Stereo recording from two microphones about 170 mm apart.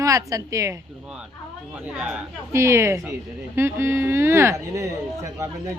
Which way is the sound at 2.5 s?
15° right (ahead or behind).